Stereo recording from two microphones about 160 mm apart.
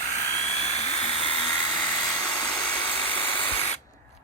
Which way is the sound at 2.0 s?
20° left (ahead or behind).